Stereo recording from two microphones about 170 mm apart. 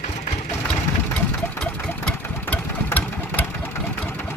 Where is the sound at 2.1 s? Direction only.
10° left (ahead or behind).